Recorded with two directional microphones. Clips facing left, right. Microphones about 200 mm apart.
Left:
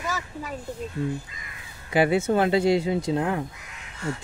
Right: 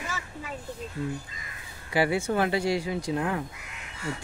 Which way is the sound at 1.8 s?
20° left (ahead or behind).